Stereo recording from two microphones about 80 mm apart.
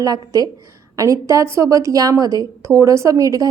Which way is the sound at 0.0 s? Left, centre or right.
Right.